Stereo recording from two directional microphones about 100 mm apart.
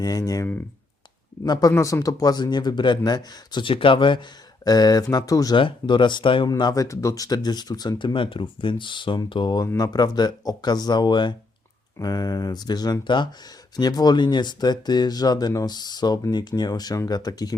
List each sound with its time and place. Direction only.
0.0 s speech: 35° left (ahead or behind)
1.7 s speech: 35° left (ahead or behind)
5.5 s speech: 55° left (ahead or behind)
6.6 s speech: 45° left (ahead or behind)
6.8 s speech: 30° left (ahead or behind); by 11.3 s 50° left (ahead or behind)
11.9 s speech: 40° left (ahead or behind)